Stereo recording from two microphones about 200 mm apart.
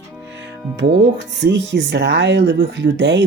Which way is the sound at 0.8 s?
60° right (ahead or behind).